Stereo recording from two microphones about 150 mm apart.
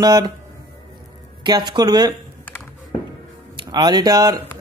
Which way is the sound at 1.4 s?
30° right (ahead or behind).